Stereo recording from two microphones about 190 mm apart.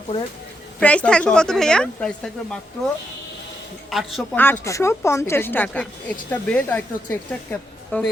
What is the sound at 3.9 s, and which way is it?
Speech, centre (ahead or behind).